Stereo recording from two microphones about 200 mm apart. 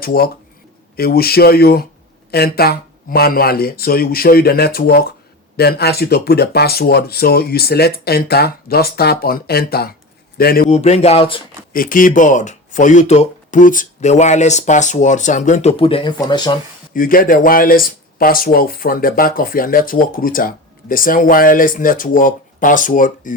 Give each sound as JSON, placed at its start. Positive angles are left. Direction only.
{"t": 0.0, "sound": "a man's voice", "side_deg": 50}
{"t": 10.8, "sound": "speech", "side_deg": 35}
{"t": 11.7, "sound": "speech", "side_deg": 45}
{"t": 16.9, "sound": "speech", "side_deg": 45}